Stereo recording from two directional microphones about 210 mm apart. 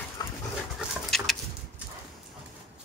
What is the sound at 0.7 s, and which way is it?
Dog, centre (ahead or behind).